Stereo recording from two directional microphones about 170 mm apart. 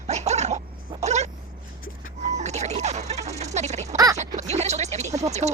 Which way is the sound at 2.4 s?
40° right (ahead or behind).